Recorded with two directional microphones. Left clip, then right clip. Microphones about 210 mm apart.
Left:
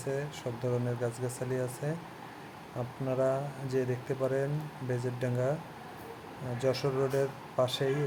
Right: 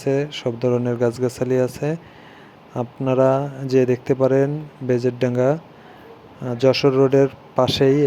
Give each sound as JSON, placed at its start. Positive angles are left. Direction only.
{"t": 0.0, "sound": "speech", "side_deg": -40}
{"t": 6.6, "sound": "speech", "side_deg": -35}